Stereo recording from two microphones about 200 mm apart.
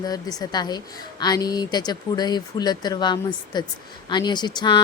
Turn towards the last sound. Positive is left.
turn(degrees=20)  # may be behind; listen again after turning